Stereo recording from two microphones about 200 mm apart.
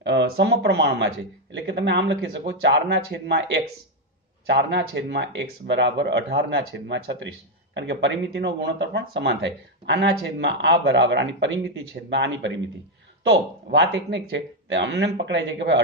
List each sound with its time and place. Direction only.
0.0 s speech: 65° right (ahead or behind)